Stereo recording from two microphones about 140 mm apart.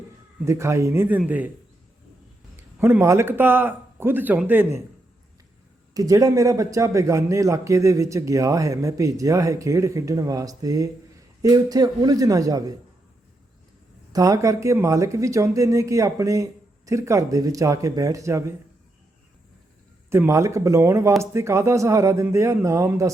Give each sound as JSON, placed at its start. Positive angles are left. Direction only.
{"t": 0.4, "sound": "a man's voice", "side_deg": -20}
{"t": 2.7, "sound": "speech", "side_deg": -15}
{"t": 5.9, "sound": "a man's voice", "side_deg": -25}
{"t": 14.1, "sound": "a man's voice", "side_deg": -25}
{"t": 20.1, "sound": "a man's voice", "side_deg": -20}